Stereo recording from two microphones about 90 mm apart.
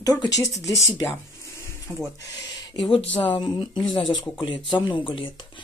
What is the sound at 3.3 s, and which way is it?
Speech, 55° left (ahead or behind).